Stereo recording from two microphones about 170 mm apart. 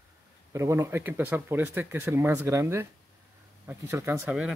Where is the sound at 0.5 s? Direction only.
20° right (ahead or behind).